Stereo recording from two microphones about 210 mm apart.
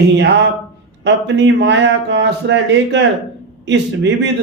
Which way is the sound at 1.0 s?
55° right (ahead or behind).